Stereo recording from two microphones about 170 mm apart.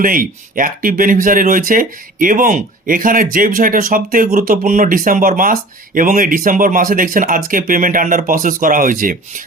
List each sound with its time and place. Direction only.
0.0 s speech: 55° right (ahead or behind)